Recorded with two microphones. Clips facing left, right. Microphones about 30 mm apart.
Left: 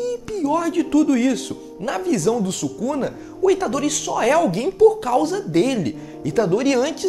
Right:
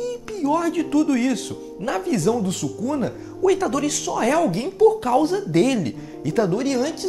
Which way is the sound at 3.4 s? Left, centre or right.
Left.